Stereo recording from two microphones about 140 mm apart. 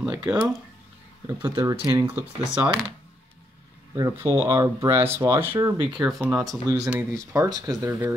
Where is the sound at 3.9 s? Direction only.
20° right (ahead or behind).